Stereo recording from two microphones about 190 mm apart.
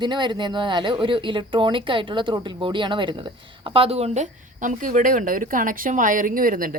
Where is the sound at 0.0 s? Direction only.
25° right (ahead or behind).